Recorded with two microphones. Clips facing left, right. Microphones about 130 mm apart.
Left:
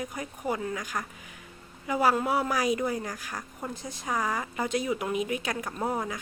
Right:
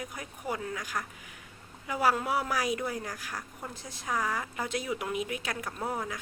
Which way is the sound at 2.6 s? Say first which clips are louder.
Left 4 dB; 5° right (ahead or behind).